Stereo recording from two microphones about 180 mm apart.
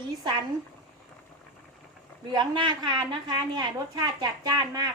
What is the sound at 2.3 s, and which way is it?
A woman's voice, 25° right (ahead or behind).